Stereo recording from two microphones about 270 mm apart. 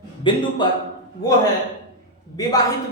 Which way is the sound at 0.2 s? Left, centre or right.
Centre.